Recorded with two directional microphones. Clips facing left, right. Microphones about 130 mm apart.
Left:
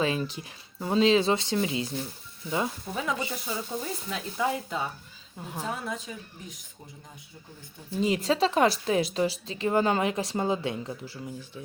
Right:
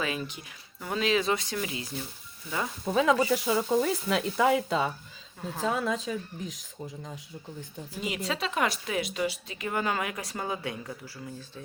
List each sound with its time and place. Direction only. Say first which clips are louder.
0.0 s speech: left 5 dB; 30° left (ahead or behind)
2.9 s speech: right 8 dB; 90° right
5.7 s speech: right 6 dB; 90° right
7.9 s a woman's voice: left 7 dB; 35° left (ahead or behind)